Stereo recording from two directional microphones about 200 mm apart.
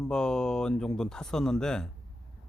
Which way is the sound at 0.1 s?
5° left (ahead or behind).